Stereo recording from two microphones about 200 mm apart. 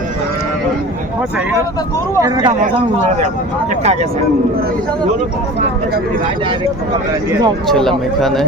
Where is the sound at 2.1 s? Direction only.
15° right (ahead or behind).